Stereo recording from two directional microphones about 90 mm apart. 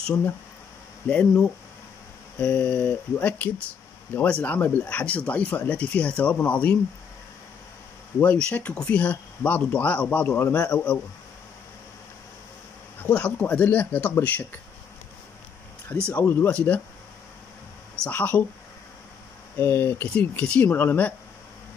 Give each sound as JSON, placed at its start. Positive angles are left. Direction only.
{"t": 1.0, "sound": "speech", "side_deg": 15}
{"t": 8.2, "sound": "a man's voice", "side_deg": 15}
{"t": 13.2, "sound": "speech", "side_deg": 15}
{"t": 16.1, "sound": "a man's voice", "side_deg": 25}
{"t": 18.0, "sound": "speech", "side_deg": 15}
{"t": 19.5, "sound": "a man's voice", "side_deg": 25}
{"t": 20.2, "sound": "speech", "side_deg": 15}